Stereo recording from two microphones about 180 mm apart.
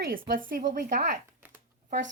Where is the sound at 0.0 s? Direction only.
55° right (ahead or behind).